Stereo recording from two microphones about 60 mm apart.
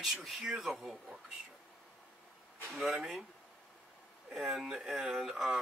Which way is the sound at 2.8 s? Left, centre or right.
Centre.